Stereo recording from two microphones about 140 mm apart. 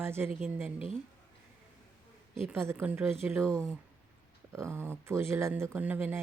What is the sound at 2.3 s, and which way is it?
A woman's voice, 20° right (ahead or behind).